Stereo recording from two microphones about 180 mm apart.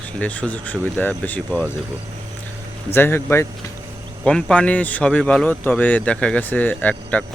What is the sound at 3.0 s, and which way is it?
Speech, 15° left (ahead or behind).